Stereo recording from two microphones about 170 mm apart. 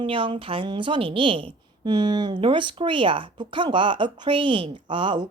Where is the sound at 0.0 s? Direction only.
30° right (ahead or behind).